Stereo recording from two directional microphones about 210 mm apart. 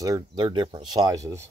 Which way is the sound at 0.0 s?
15° right (ahead or behind).